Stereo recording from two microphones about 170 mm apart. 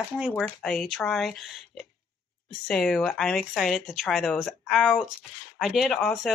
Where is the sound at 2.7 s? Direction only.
Centre (ahead or behind).